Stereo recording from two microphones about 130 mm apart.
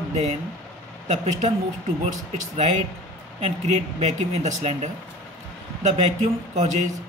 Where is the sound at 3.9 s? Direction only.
60° right (ahead or behind).